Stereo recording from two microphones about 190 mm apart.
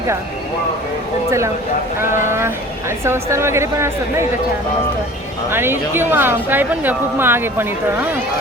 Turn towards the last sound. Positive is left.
turn(degrees=-10)  # may be behind; listen again after turning